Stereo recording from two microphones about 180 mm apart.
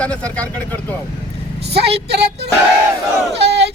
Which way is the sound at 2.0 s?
65° right (ahead or behind).